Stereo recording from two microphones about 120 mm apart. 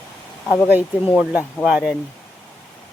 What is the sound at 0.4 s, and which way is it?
Speech, 20° left (ahead or behind).